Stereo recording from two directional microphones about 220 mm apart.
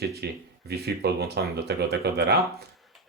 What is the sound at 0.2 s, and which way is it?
Speech, 45° right (ahead or behind).